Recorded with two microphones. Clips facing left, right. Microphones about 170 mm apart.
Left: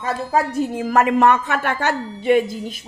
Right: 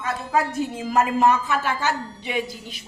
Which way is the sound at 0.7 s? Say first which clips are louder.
Left 5 dB; 60° left (ahead or behind).